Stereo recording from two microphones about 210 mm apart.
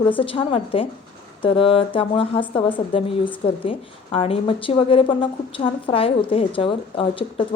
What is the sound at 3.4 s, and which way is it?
A woman's voice, 25° left (ahead or behind).